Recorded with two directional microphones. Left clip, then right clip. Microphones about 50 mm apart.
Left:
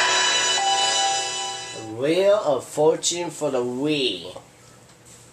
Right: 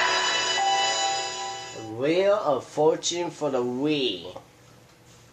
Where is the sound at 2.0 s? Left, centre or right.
Right.